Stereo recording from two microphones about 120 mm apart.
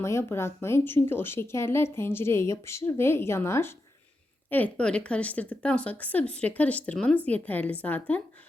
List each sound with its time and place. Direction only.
0.0 s a woman's voice: 20° left (ahead or behind)